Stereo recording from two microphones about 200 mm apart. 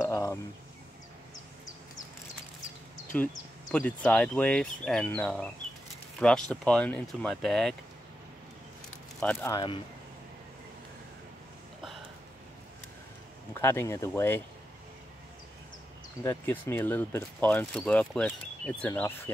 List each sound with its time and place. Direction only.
0.0 s a sound: 15° left (ahead or behind)
3.1 s speech: 5° left (ahead or behind)
9.2 s speech: 10° left (ahead or behind)
13.6 s speech: 15° left (ahead or behind)
16.2 s speech: 10° left (ahead or behind)